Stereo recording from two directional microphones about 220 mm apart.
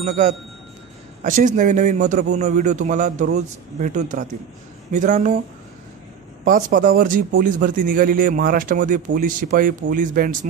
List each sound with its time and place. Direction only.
0.0 s a man's voice: 30° right (ahead or behind)
6.4 s a man's voice: 35° right (ahead or behind)